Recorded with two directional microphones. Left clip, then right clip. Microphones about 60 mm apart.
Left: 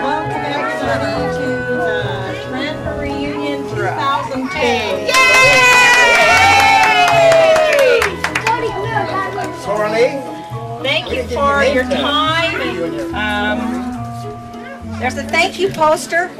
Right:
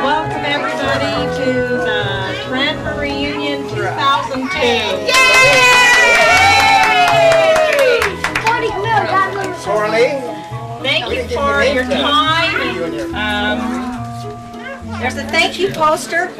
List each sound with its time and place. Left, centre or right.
0.7 s speech: right
1.9 s music: right
4.0 s a sound: right
4.6 s music: right
8.5 s music: right
10.9 s a sound: right
15.0 s a woman's voice: right